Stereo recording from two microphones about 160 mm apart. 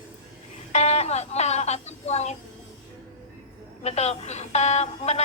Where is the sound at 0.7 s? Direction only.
45° left (ahead or behind).